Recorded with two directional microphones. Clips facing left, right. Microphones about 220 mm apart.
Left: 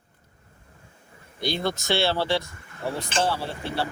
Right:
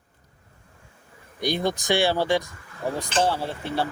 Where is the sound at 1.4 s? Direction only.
15° right (ahead or behind).